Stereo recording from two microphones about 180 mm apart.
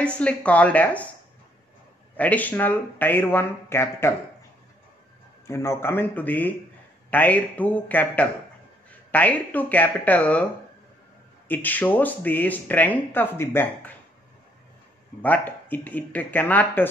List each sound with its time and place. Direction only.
0.0 s speech: 5° left (ahead or behind)
2.1 s speech: 10° left (ahead or behind)
5.5 s speech: 15° left (ahead or behind)
11.4 s speech: 10° left (ahead or behind)
15.2 s speech: 10° left (ahead or behind)